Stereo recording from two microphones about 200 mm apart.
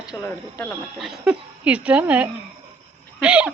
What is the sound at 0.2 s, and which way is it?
Speech, 15° left (ahead or behind).